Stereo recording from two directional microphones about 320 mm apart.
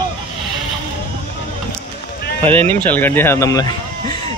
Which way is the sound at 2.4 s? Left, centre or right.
Centre.